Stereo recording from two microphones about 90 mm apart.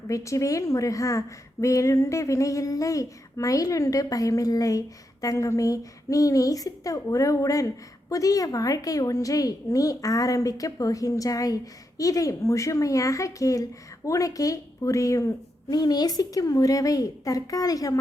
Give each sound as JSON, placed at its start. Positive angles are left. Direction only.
{"t": 0.1, "sound": "a woman's voice", "side_deg": 35}
{"t": 15.8, "sound": "a woman's voice", "side_deg": 50}